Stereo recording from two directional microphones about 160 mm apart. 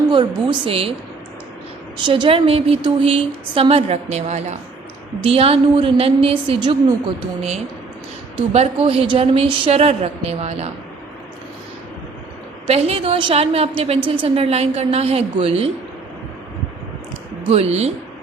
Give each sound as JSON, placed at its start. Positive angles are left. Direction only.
{"t": 0.1, "sound": "a woman's voice", "side_deg": -30}
{"t": 2.0, "sound": "a woman's voice", "side_deg": -30}
{"t": 8.4, "sound": "a woman's voice", "side_deg": -40}
{"t": 12.6, "sound": "a woman's voice", "side_deg": -40}
{"t": 17.5, "sound": "a woman's voice", "side_deg": -40}